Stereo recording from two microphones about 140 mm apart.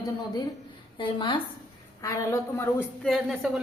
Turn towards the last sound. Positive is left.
turn(degrees=0)  # may be behind; listen again after turning